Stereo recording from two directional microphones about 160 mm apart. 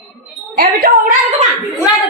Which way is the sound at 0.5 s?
70° right (ahead or behind).